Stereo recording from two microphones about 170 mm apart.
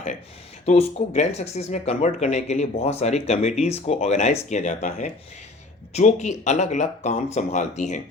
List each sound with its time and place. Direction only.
0.6 s speech: 40° left (ahead or behind)